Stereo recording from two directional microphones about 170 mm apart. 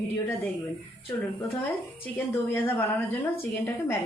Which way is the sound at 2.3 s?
10° left (ahead or behind).